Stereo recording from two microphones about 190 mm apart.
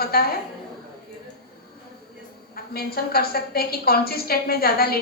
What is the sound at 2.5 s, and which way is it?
A woman's voice, 55° left (ahead or behind).